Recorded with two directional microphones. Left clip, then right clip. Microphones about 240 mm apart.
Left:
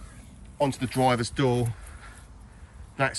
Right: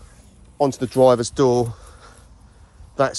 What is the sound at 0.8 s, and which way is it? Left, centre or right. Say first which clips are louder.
Speech: right 12 dB; centre.